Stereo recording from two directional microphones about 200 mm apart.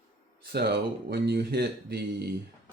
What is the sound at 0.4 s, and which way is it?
Speech, 55° right (ahead or behind).